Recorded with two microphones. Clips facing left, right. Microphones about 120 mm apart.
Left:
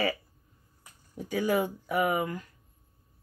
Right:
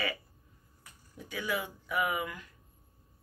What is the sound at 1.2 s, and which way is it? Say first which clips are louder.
Speech: left 8 dB; 40° left (ahead or behind).